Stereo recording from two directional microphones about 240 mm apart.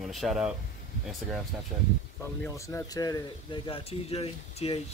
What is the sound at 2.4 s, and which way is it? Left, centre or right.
Speech, centre.